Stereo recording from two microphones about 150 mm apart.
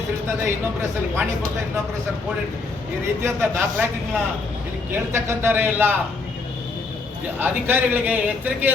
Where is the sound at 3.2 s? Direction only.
15° right (ahead or behind).